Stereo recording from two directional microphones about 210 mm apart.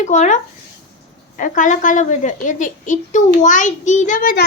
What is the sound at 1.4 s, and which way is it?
A woman's voice, 40° left (ahead or behind).